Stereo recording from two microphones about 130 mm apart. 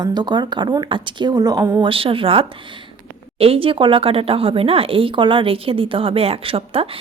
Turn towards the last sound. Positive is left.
turn(degrees=-45)  # may be behind; listen again after turning